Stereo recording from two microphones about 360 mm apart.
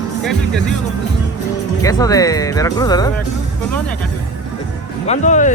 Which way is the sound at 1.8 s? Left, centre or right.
Centre.